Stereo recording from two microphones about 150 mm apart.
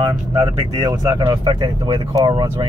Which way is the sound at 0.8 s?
25° right (ahead or behind).